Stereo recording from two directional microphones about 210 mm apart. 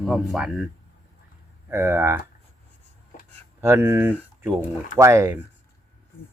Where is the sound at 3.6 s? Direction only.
10° right (ahead or behind).